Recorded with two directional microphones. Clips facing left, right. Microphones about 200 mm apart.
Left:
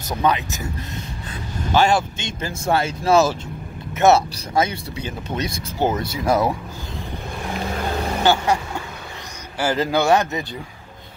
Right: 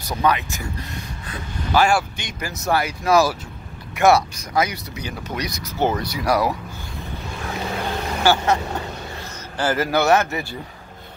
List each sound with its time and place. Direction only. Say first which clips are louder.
0.1 s speech: even; 20° left (ahead or behind)
1.7 s speech: left 1 dB; 25° left (ahead or behind)
8.2 s speech: even; 15° left (ahead or behind)
9.6 s a man's voice: even; 15° left (ahead or behind)